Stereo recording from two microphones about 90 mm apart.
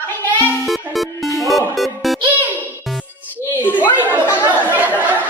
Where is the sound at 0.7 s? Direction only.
Centre (ahead or behind).